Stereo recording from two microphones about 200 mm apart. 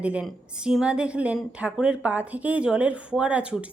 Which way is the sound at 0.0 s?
5° right (ahead or behind).